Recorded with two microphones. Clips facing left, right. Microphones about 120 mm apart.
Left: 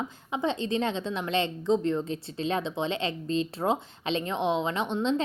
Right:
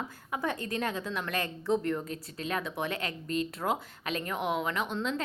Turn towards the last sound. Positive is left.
turn(degrees=25)  # may be behind; listen again after turning